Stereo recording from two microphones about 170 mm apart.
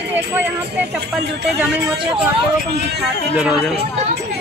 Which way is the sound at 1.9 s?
30° right (ahead or behind).